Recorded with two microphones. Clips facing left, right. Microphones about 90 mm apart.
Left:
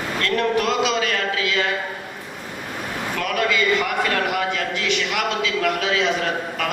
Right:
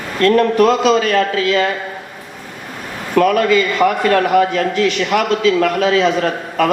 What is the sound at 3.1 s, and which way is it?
A man's voice, 45° right (ahead or behind).